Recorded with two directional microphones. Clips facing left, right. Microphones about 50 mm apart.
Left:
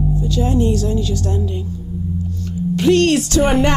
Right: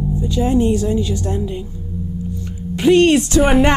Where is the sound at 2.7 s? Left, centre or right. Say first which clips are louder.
Right 2 dB; centre.